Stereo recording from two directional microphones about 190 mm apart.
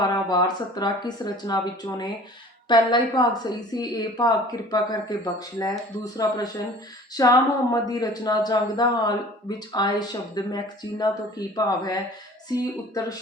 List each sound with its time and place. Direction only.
0.3 s a woman's voice: 20° left (ahead or behind)